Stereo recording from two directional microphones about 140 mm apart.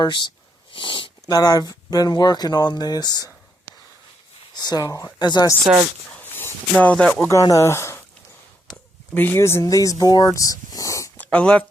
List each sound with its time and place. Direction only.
0.0 s speech: 35° left (ahead or behind)
4.5 s speech: 30° left (ahead or behind)
6.1 s speech: 10° left (ahead or behind)
7.4 s speech: 20° left (ahead or behind)
11.2 s speech: 10° left (ahead or behind)